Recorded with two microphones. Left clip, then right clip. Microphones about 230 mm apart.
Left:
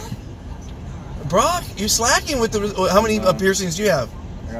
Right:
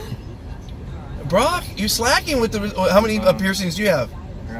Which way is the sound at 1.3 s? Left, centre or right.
Right.